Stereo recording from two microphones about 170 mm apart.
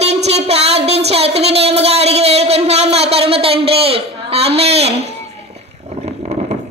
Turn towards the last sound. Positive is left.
turn(degrees=-35)  # may be behind; listen again after turning